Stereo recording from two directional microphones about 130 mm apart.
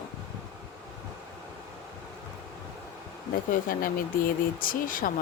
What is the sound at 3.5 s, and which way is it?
Speech, 90° left.